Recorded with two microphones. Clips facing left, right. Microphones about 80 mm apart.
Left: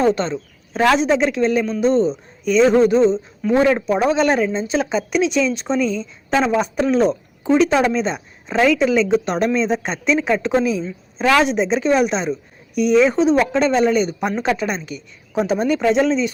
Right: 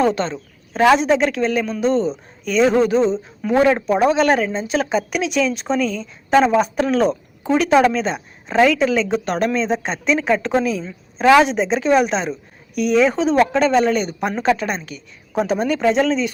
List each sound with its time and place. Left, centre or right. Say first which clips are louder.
0.0 s a woman's voice: left 1 dB; centre